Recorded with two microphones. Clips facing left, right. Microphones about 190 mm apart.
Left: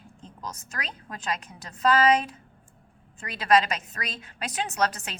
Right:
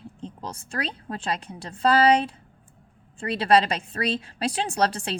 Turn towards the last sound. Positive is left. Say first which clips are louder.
# right 3 dB
turn(degrees=-30)  # may be behind; listen again after turning